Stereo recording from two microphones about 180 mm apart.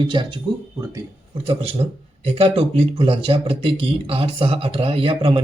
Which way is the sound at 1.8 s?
35° right (ahead or behind).